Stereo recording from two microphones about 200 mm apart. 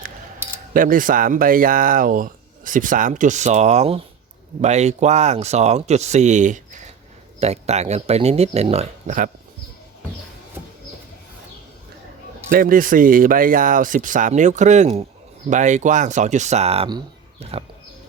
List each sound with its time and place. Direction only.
0.7 s speech: 45° right (ahead or behind)
12.5 s speech: 45° right (ahead or behind)